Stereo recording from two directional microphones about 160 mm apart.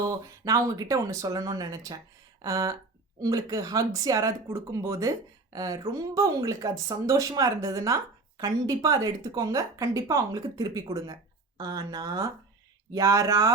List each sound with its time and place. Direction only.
0.1 s speech: 20° right (ahead or behind)